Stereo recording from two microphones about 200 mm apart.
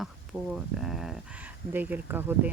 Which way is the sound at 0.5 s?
Centre (ahead or behind).